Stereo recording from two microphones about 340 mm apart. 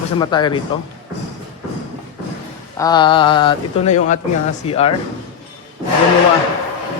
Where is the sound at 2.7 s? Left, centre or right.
Centre.